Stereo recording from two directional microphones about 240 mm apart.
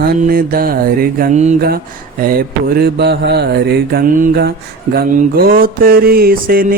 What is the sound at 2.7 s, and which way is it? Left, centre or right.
Mantra, right.